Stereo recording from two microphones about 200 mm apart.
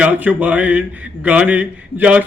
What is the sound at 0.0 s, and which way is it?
Speech, 5° right (ahead or behind).